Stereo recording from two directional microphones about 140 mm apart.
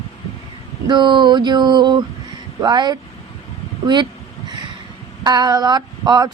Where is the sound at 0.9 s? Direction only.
35° right (ahead or behind).